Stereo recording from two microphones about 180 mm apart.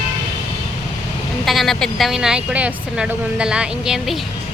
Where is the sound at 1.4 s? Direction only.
Centre (ahead or behind).